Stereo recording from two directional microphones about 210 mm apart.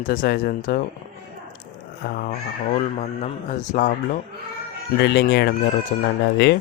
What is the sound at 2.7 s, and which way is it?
A man's voice, 35° left (ahead or behind).